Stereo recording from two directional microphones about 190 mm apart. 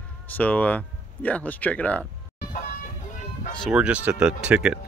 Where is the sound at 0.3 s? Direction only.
10° left (ahead or behind).